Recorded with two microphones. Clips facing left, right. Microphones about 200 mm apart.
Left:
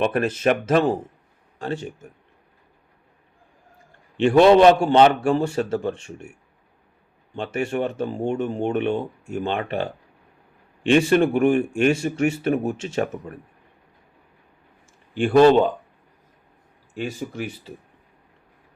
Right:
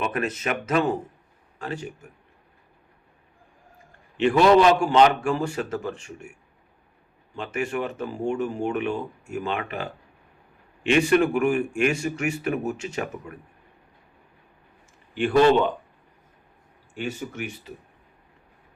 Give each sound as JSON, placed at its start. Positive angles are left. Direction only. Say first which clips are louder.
{"t": 0.0, "sound": "speech", "louder": "left 7 dB", "side_deg": 30}
{"t": 4.2, "sound": "speech", "louder": "left 4 dB", "side_deg": 30}
{"t": 7.3, "sound": "speech", "louder": "left 3 dB", "side_deg": 30}
{"t": 15.2, "sound": "speech", "louder": "left 4 dB", "side_deg": 35}
{"t": 16.9, "sound": "speech", "louder": "left 2 dB", "side_deg": 35}